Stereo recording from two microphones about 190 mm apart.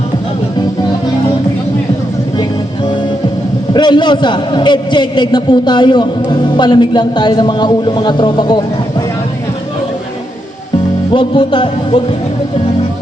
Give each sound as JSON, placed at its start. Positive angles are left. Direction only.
{"t": 3.7, "sound": "a man's voice", "side_deg": 25}
{"t": 11.1, "sound": "a man's voice", "side_deg": 25}